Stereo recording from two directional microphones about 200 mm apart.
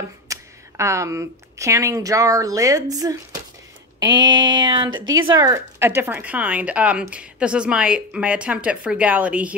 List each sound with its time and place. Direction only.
0.3 s speech: 15° right (ahead or behind)